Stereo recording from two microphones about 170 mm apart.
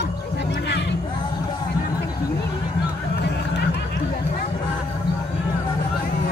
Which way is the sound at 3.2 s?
80° left.